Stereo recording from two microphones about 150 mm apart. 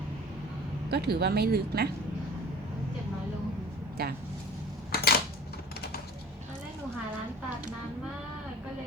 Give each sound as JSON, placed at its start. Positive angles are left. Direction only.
{"t": 0.9, "sound": "speech", "side_deg": -90}
{"t": 4.0, "sound": "speech", "side_deg": -90}
{"t": 4.9, "sound": "a sound", "side_deg": 90}